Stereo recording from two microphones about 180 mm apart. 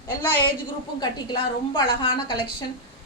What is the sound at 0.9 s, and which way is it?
A woman's voice, 25° left (ahead or behind).